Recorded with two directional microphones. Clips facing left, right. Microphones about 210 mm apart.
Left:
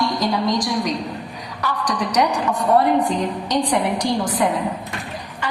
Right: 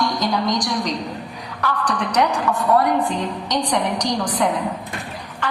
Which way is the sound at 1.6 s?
10° left (ahead or behind).